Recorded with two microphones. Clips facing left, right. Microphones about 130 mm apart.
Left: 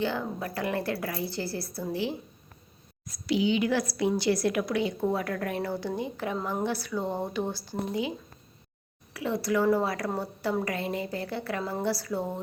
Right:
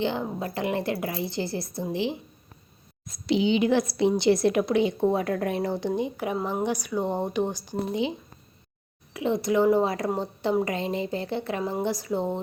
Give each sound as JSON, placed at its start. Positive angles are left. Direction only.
{"t": 0.0, "sound": "a woman's voice", "side_deg": -20}
{"t": 9.1, "sound": "a woman's voice", "side_deg": -20}